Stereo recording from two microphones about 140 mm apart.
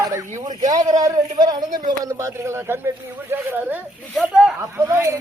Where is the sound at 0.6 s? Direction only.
60° right (ahead or behind).